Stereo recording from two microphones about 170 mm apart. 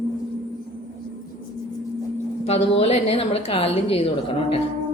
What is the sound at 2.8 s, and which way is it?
A woman's voice, 35° left (ahead or behind).